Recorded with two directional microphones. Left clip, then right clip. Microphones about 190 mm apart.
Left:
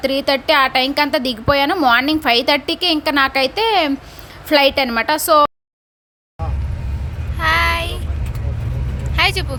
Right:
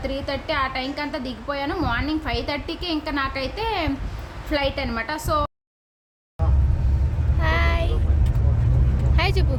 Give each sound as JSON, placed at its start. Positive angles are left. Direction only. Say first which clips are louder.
{"t": 0.0, "sound": "a woman's voice", "louder": "left 11 dB", "side_deg": 45}
{"t": 7.3, "sound": "child singing", "louder": "left 9 dB", "side_deg": 0}
{"t": 9.1, "sound": "vehicle", "louder": "left 8 dB", "side_deg": 0}